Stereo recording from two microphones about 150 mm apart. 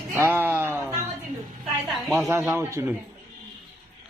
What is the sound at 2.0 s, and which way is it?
Speech, centre (ahead or behind).